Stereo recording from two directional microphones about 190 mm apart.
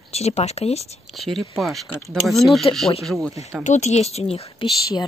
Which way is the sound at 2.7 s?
25° left (ahead or behind).